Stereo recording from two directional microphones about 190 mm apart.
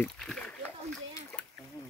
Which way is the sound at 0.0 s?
5° left (ahead or behind).